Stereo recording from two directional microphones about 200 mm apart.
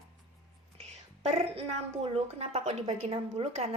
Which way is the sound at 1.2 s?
30° right (ahead or behind).